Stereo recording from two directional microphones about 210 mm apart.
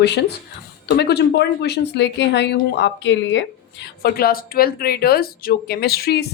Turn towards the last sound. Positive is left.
turn(degrees=50)  # may be behind; listen again after turning